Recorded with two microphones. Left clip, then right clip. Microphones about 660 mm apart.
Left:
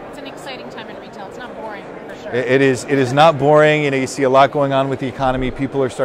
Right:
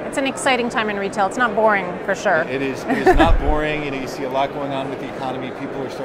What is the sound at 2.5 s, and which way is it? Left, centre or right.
A man's voice, left.